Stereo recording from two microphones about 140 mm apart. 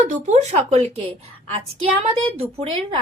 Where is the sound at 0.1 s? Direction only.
55° right (ahead or behind).